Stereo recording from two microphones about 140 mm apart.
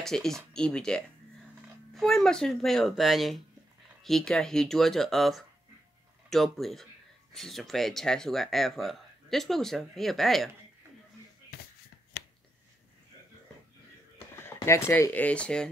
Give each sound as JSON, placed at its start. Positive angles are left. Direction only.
{"t": 0.0, "sound": "speech", "side_deg": 5}
{"t": 14.1, "sound": "speech", "side_deg": 20}